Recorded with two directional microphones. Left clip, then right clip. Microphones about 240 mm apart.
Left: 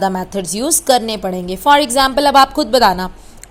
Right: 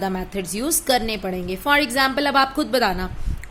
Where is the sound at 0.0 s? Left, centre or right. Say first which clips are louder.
Left 8 dB; centre.